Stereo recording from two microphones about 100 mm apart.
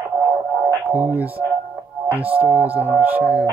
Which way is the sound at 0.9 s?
20° right (ahead or behind).